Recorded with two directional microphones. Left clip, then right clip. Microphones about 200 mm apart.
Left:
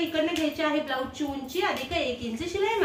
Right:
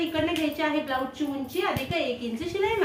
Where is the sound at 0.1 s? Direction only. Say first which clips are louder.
Even; 5° left (ahead or behind).